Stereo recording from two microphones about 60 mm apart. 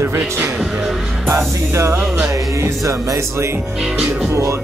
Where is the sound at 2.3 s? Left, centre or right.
Right.